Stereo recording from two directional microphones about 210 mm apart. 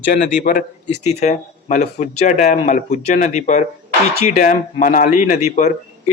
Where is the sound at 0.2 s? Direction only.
40° left (ahead or behind).